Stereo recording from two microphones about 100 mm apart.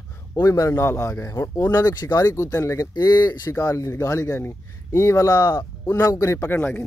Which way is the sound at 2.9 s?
40° left (ahead or behind).